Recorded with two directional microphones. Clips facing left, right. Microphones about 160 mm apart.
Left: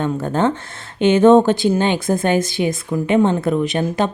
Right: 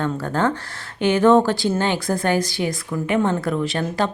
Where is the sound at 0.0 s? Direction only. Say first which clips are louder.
Left 3 dB; 20° left (ahead or behind).